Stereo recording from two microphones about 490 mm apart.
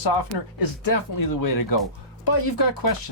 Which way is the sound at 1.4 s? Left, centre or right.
Left.